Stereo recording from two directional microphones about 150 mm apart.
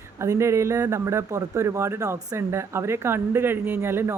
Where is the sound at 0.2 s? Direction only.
20° right (ahead or behind).